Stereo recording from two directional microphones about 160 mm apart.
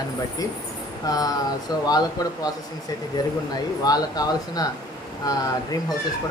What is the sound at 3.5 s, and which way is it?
Speech, 25° left (ahead or behind).